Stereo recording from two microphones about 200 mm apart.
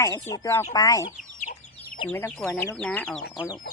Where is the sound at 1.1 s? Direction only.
40° left (ahead or behind).